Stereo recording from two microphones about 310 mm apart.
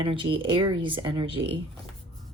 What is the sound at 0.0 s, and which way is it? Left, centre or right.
Speech, centre.